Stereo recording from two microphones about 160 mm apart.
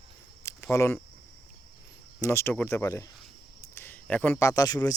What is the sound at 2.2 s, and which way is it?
Speech, 15° left (ahead or behind).